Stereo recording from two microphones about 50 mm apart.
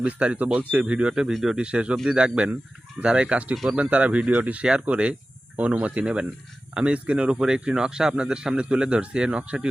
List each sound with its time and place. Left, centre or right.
0.0 s a man's voice: right
1.3 s speech: centre
1.5 s a man's voice: right
4.2 s a man's voice: centre